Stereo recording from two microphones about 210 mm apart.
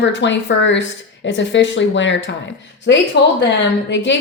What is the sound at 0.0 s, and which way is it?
A woman's voice, 60° left (ahead or behind).